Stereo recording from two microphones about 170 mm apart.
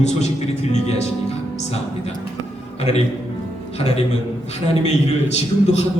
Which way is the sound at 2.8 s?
40° left (ahead or behind).